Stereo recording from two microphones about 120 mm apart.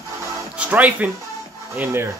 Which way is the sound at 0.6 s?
15° right (ahead or behind).